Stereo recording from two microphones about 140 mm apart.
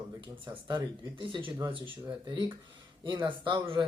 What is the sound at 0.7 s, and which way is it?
Speech, 35° right (ahead or behind).